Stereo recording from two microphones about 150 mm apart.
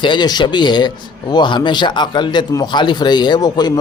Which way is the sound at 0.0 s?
30° left (ahead or behind).